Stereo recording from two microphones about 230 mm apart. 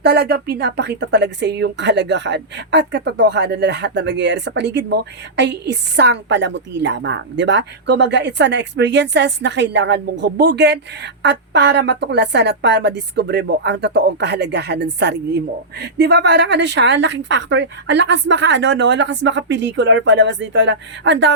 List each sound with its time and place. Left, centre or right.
0.0 s a woman's voice: right